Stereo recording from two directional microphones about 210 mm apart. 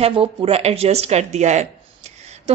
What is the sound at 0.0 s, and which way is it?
A woman's voice, 25° right (ahead or behind).